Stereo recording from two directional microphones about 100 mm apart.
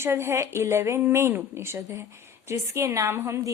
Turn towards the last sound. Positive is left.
turn(degrees=-25)  # may be behind; listen again after turning